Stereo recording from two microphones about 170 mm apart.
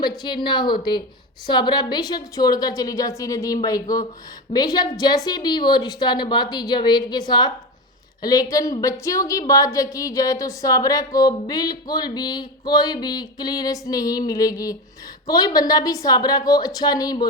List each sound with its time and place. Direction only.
0.0 s a woman's voice: 25° left (ahead or behind)